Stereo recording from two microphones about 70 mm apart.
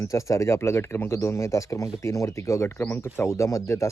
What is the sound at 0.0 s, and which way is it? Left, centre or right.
Speech, left.